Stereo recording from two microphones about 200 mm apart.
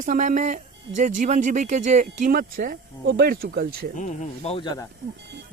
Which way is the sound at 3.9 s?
35° left (ahead or behind).